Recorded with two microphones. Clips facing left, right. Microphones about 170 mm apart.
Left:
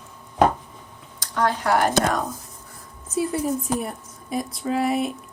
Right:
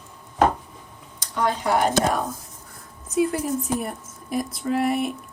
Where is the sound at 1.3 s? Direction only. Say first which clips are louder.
Left 1 dB; 15° right (ahead or behind).